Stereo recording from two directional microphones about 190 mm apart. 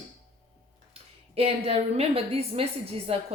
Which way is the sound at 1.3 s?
30° right (ahead or behind).